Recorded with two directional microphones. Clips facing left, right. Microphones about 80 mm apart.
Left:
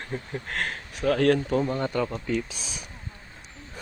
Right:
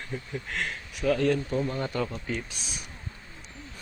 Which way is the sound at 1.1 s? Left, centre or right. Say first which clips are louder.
Left 4 dB; left.